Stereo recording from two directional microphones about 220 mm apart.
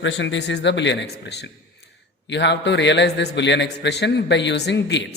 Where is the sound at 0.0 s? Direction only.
55° left (ahead or behind).